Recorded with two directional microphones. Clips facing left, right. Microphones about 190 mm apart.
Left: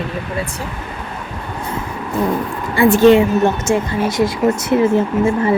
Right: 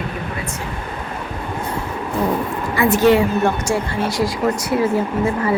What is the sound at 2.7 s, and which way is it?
A woman's voice, 30° left (ahead or behind).